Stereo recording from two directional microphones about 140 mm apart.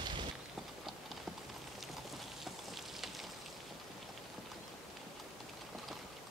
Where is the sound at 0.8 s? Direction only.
Centre (ahead or behind).